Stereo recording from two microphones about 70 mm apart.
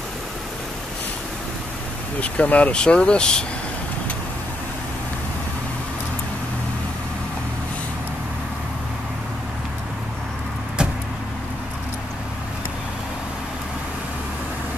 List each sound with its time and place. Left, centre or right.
2.1 s speech: left